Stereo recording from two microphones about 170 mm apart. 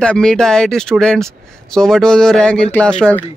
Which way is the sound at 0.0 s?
5° left (ahead or behind).